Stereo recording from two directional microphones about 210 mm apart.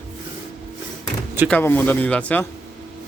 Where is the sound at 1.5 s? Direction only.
10° left (ahead or behind).